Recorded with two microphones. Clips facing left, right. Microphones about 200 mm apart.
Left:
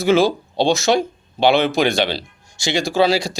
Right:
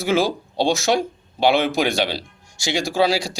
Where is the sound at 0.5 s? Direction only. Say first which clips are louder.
Left 1 dB; 10° right (ahead or behind).